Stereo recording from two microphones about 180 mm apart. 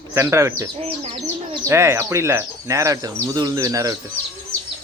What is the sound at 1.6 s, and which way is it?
Speech, 15° right (ahead or behind).